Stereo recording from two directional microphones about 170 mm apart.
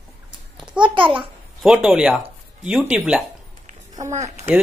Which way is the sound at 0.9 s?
30° right (ahead or behind).